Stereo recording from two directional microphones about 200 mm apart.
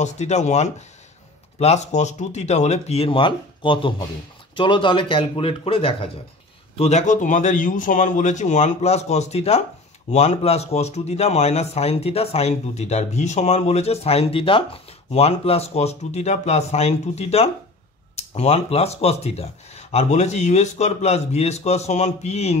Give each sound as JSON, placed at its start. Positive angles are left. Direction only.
{"t": 0.0, "sound": "a man's voice", "side_deg": 35}